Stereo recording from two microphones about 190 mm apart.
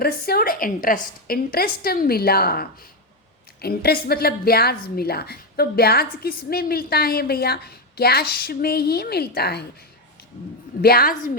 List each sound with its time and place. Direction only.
0.0 s a woman's voice: 55° left (ahead or behind)
10.8 s a woman's voice: 55° left (ahead or behind)